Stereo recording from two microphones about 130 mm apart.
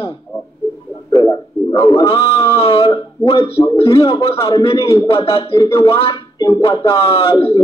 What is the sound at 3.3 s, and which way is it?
Speech, 50° left (ahead or behind).